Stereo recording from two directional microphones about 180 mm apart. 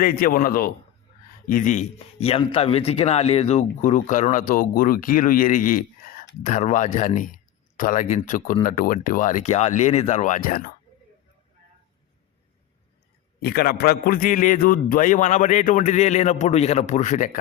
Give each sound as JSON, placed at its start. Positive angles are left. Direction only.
{"t": 0.0, "sound": "speech", "side_deg": 50}
{"t": 13.4, "sound": "speech", "side_deg": 55}